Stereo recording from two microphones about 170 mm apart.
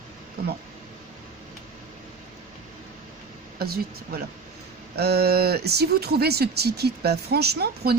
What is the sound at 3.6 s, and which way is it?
Speech, 65° right (ahead or behind).